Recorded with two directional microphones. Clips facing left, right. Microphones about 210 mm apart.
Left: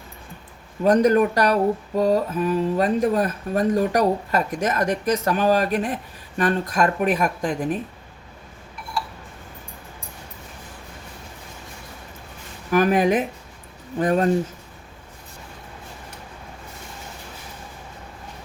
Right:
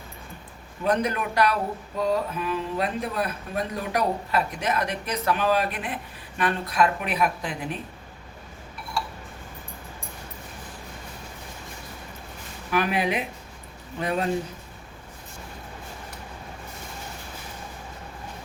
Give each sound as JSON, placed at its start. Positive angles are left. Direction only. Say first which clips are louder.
{"t": 0.9, "sound": "speech", "louder": "left 9 dB", "side_deg": 45}
{"t": 12.7, "sound": "speech", "louder": "left 7 dB", "side_deg": 45}